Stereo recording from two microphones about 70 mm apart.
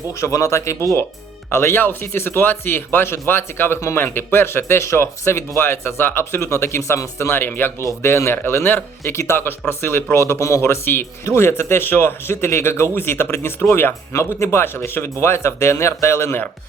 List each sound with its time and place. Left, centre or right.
0.1 s speech: left
8.0 s speech: left
14.1 s speech: left